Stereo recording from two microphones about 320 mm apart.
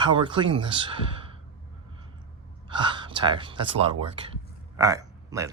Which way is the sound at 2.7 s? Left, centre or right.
Centre.